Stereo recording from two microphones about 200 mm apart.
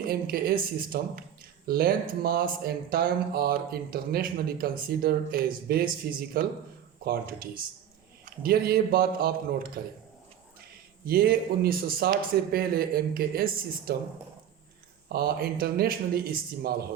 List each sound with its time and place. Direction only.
0.0 s speech: 50° right (ahead or behind)
11.0 s speech: 50° right (ahead or behind)
15.1 s speech: 50° right (ahead or behind)